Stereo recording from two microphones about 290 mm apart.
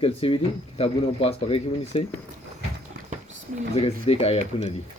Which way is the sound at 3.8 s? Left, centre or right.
Centre.